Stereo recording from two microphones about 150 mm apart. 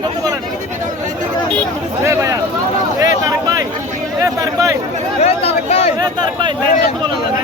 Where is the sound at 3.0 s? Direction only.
25° right (ahead or behind).